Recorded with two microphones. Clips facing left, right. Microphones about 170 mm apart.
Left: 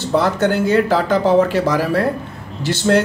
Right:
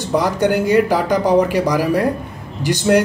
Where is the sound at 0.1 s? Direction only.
15° right (ahead or behind).